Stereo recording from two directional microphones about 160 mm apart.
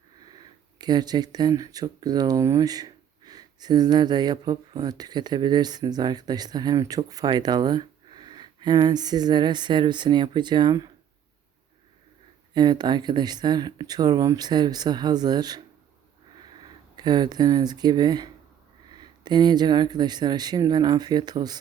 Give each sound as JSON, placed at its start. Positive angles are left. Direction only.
{"t": 0.8, "sound": "speech", "side_deg": -25}
{"t": 12.5, "sound": "speech", "side_deg": -25}
{"t": 17.0, "sound": "speech", "side_deg": -25}